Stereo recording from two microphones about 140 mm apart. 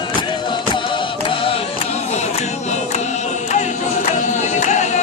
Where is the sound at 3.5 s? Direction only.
55° left (ahead or behind).